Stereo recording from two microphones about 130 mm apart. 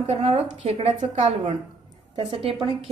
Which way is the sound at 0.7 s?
60° right (ahead or behind).